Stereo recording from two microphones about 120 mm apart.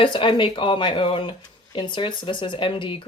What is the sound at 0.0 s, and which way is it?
A woman's voice, 45° left (ahead or behind).